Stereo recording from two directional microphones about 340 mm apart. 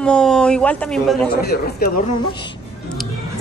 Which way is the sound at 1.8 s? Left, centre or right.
Left.